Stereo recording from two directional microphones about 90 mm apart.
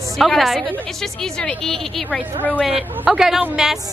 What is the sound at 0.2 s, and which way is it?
A woman's voice, centre (ahead or behind).